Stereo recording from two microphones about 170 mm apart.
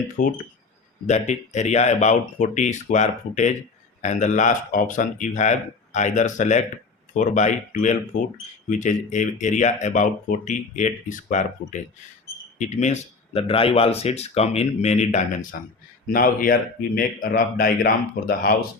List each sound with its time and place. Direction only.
0.2 s speech: 50° left (ahead or behind)
1.3 s speech: 40° left (ahead or behind); by 18.5 s 60° left (ahead or behind)